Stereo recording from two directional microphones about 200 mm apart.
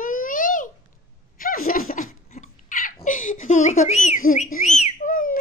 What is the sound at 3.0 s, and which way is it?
Whistling, 40° left (ahead or behind).